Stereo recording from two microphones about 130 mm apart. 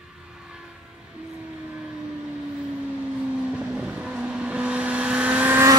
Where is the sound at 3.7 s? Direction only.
5° right (ahead or behind).